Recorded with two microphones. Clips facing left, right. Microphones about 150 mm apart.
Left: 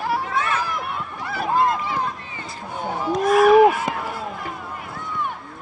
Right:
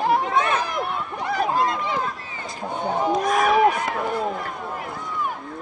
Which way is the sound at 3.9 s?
Centre (ahead or behind).